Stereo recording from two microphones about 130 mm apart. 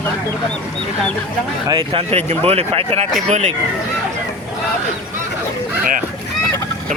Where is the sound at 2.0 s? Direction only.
50° right (ahead or behind).